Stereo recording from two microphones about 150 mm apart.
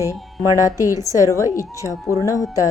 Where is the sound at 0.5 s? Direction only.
20° left (ahead or behind).